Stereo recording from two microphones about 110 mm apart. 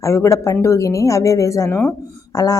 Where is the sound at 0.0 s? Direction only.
25° left (ahead or behind).